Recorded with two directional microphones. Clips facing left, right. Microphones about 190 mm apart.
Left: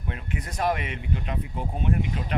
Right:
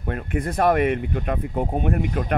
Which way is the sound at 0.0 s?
55° right (ahead or behind).